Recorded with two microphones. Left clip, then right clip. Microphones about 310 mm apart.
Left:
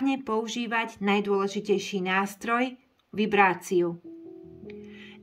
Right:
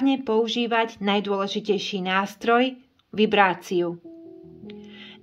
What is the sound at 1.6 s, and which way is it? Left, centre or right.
Speech, right.